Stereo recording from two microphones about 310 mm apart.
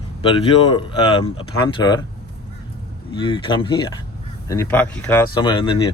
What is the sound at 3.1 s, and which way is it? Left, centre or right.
Speech, centre.